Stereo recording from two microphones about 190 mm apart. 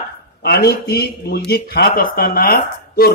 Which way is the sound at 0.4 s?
55° left (ahead or behind).